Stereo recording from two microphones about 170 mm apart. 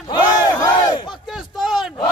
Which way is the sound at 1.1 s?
Centre (ahead or behind).